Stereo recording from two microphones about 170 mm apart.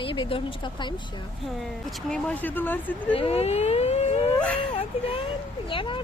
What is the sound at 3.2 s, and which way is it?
Speech, 35° left (ahead or behind).